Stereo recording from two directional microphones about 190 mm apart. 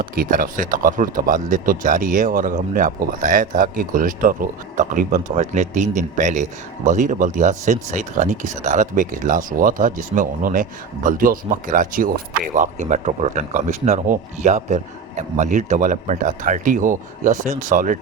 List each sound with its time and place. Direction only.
0.0 s speech: 45° right (ahead or behind)